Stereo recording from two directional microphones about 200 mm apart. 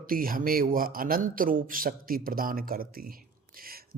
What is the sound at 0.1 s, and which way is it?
A man's voice, 45° right (ahead or behind).